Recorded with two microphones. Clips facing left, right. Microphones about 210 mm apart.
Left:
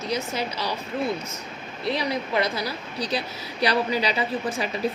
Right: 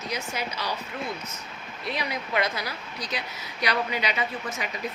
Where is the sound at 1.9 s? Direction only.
30° left (ahead or behind).